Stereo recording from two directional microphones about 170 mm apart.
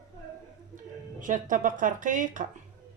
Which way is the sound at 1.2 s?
50° right (ahead or behind).